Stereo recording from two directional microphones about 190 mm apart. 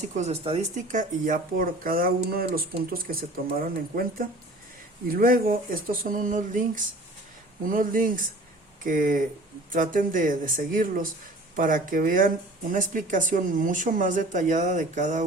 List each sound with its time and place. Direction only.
0.2 s speech: 35° right (ahead or behind)